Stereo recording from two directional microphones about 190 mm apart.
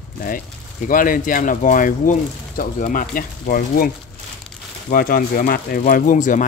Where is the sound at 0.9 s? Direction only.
45° left (ahead or behind).